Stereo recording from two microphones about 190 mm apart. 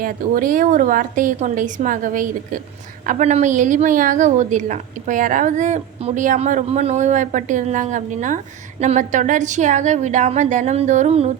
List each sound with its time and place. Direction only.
0.0 s a woman's voice: 45° right (ahead or behind)